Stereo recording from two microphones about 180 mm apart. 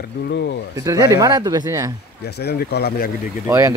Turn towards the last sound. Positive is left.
turn(degrees=-15)  # may be behind; listen again after turning